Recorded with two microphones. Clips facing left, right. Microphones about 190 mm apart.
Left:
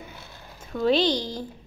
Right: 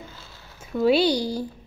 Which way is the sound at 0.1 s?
20° left (ahead or behind).